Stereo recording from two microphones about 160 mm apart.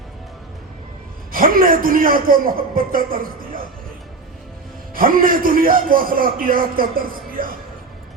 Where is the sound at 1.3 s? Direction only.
60° right (ahead or behind).